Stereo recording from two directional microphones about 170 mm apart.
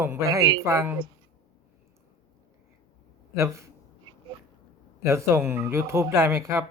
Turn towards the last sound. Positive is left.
turn(degrees=-15)  # may be behind; listen again after turning